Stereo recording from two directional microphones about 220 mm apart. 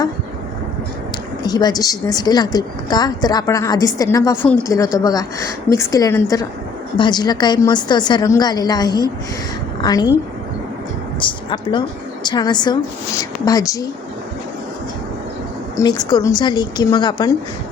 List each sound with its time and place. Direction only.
1.5 s a woman's voice: 20° left (ahead or behind)
11.2 s a woman's voice: 20° left (ahead or behind)
15.8 s a woman's voice: 15° left (ahead or behind)